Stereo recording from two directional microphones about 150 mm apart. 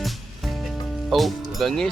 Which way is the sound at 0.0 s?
Centre (ahead or behind).